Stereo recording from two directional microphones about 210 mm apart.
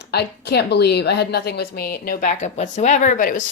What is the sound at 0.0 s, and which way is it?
A woman's voice, 55° left (ahead or behind).